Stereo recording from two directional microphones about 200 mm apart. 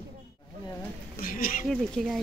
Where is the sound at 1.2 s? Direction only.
45° left (ahead or behind).